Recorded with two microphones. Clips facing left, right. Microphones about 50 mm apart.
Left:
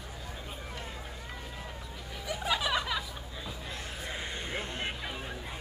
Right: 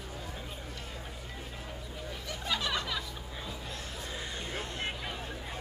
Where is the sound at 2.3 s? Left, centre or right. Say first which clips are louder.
Left 4 dB; centre.